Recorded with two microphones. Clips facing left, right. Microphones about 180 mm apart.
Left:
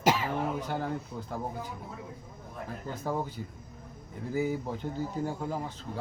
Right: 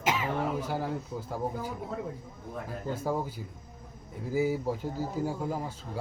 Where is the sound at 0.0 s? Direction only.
35° left (ahead or behind).